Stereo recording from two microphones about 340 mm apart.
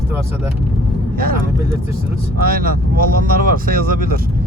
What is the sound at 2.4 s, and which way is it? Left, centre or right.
Speech, right.